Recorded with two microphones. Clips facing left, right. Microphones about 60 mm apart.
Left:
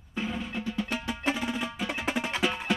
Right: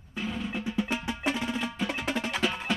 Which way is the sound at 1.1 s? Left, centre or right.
Centre.